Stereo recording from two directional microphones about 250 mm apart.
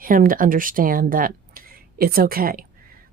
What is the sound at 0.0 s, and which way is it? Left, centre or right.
Speech, right.